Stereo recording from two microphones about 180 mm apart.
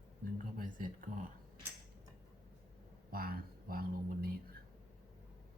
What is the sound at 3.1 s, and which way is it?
Speech, 55° right (ahead or behind).